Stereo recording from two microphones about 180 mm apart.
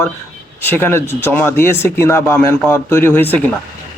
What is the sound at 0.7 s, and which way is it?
A man's voice, 10° left (ahead or behind).